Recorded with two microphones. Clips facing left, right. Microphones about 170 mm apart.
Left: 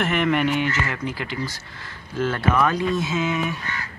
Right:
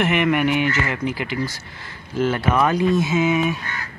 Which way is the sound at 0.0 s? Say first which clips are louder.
Right 2 dB; 5° right (ahead or behind).